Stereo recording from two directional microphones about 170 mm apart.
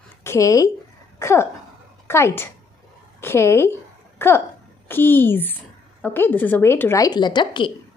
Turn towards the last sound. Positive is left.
turn(degrees=30)  # may be behind; listen again after turning